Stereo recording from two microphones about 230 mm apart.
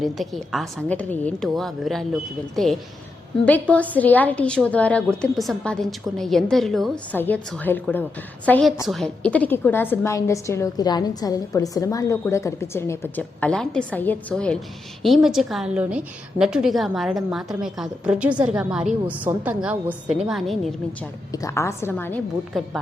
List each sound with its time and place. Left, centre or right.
0.0 s a woman's voice: centre
21.3 s a woman's voice: centre